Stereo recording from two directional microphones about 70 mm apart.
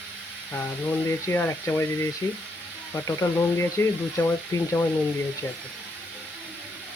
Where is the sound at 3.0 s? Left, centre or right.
Left.